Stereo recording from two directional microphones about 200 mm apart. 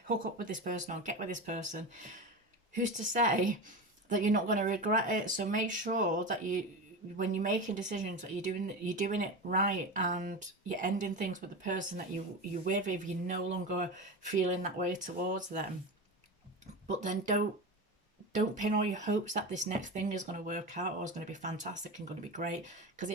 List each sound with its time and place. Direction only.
0.3 s speech: 40° right (ahead or behind)
16.8 s speech: 35° right (ahead or behind)
18.6 s speech: 35° right (ahead or behind)